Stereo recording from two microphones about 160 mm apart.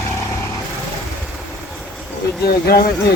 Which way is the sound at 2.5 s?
75° left (ahead or behind).